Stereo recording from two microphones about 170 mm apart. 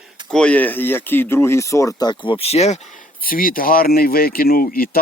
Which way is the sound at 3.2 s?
55° left (ahead or behind).